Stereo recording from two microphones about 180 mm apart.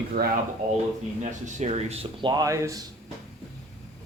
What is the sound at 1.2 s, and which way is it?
Speech, 40° right (ahead or behind).